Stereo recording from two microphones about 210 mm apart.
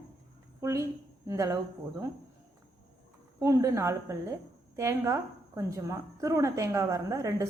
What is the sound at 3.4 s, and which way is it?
A woman's voice, 15° right (ahead or behind).